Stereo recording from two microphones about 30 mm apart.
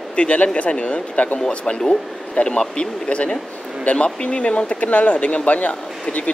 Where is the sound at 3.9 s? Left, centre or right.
Left.